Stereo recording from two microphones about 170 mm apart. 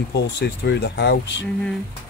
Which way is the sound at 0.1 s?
85° left.